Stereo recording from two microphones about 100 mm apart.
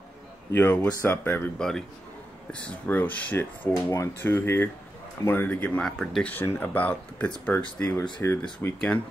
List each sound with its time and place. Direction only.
0.5 s speech: 20° left (ahead or behind)
1.6 s speech: 5° left (ahead or behind)
5.9 s speech: 5° left (ahead or behind)
6.4 s speech: 20° left (ahead or behind)
7.8 s speech: 25° left (ahead or behind)